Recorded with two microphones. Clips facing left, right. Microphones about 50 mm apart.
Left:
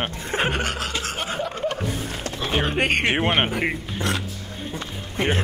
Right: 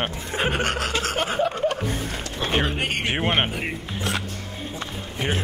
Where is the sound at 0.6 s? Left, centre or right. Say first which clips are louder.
Right 2 dB; right.